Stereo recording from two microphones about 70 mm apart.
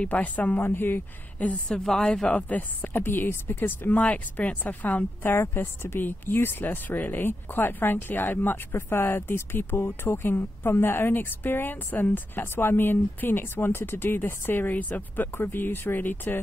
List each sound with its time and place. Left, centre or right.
0.0 s speech: left
1.9 s speech: centre; by 16.3 s left